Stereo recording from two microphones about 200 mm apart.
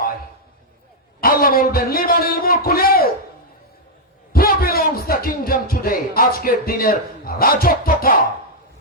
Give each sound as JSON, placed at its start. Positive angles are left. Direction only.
{"t": 1.2, "sound": "a man's voice", "side_deg": 45}
{"t": 4.3, "sound": "a man's voice", "side_deg": 50}